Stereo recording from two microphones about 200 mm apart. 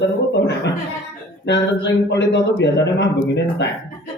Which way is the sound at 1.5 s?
60° left (ahead or behind).